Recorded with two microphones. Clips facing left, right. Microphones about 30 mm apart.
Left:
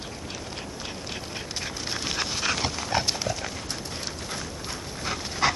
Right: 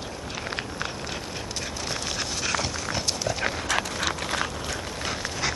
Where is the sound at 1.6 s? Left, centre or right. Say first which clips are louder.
Even; centre.